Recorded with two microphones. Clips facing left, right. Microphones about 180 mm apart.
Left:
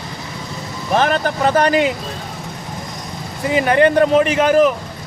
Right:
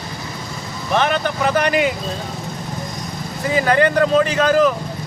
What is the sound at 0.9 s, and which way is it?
Speech, 40° left (ahead or behind).